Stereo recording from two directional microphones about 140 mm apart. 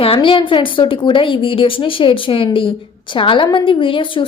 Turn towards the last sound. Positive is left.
turn(degrees=35)  # may be behind; listen again after turning